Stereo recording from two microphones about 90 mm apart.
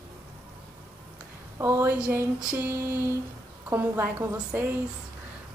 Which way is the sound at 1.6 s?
25° right (ahead or behind).